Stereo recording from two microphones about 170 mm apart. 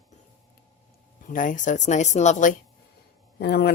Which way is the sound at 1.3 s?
50° left (ahead or behind).